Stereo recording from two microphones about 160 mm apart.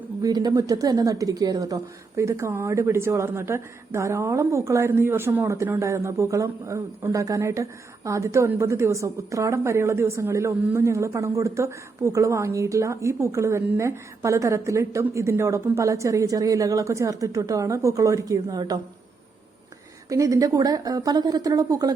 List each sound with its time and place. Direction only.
0.2 s a woman's voice: 25° right (ahead or behind)
20.1 s a woman's voice: 20° right (ahead or behind)